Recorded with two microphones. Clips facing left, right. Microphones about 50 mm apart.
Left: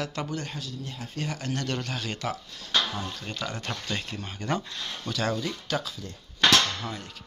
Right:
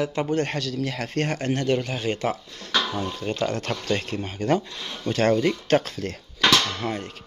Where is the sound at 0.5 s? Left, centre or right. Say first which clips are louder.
Right 10 dB; right.